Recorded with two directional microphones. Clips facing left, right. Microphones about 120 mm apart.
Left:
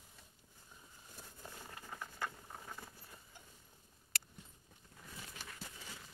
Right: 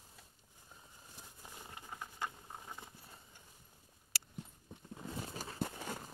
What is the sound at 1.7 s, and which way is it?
Patter, 20° right (ahead or behind).